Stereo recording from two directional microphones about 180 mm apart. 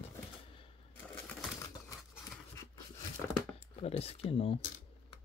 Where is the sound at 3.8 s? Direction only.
35° left (ahead or behind).